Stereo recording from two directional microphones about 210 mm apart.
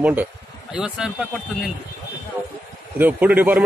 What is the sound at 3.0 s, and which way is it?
Speech, 5° right (ahead or behind).